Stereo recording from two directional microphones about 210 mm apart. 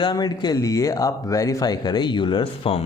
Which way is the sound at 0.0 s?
20° left (ahead or behind).